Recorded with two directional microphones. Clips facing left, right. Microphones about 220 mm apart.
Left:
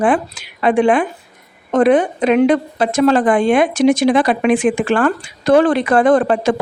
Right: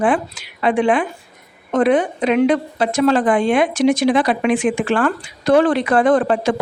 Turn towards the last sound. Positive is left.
turn(degrees=50)  # may be behind; listen again after turning